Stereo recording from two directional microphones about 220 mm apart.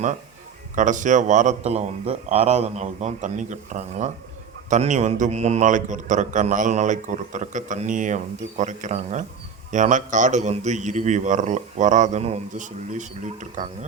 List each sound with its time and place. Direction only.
0.8 s a man's voice: 35° right (ahead or behind)